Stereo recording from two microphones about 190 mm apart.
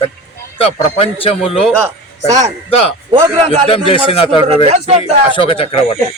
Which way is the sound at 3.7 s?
30° left (ahead or behind).